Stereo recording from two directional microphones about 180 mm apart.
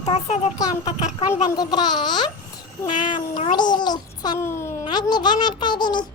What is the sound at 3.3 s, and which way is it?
A child's voice, 25° left (ahead or behind).